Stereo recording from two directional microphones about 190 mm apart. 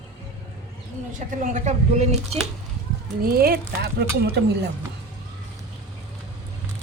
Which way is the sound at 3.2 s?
55° right (ahead or behind).